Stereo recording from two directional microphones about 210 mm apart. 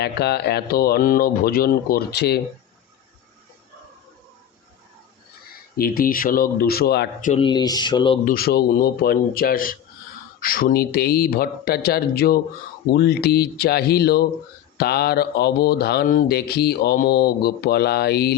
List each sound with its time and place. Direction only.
0.0 s speech: 50° left (ahead or behind)
5.7 s speech: 45° left (ahead or behind)
7.3 s speech: 25° left (ahead or behind)
8.2 s speech: 45° left (ahead or behind)